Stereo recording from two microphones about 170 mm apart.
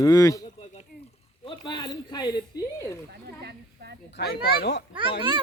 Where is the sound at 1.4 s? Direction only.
25° left (ahead or behind).